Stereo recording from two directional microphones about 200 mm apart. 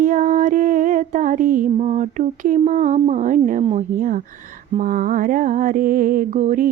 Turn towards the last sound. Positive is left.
turn(degrees=-40)  # may be behind; listen again after turning